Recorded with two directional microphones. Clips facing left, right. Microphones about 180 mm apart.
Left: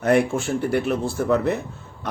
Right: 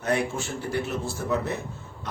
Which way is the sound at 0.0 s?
60° left (ahead or behind).